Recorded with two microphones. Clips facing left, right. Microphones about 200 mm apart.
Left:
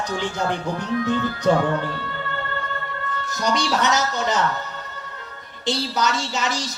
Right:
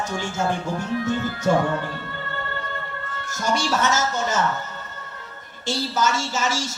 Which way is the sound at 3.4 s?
15° left (ahead or behind).